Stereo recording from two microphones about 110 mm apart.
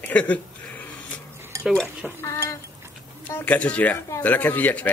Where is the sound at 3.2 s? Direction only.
15° left (ahead or behind).